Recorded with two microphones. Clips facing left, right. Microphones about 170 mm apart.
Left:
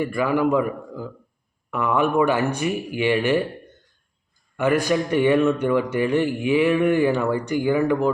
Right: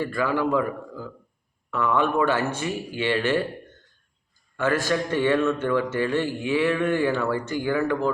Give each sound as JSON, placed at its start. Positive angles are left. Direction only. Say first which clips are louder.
{"t": 0.0, "sound": "a man's voice", "louder": "left 3 dB", "side_deg": 15}
{"t": 4.5, "sound": "a man's voice", "louder": "left 4 dB", "side_deg": 15}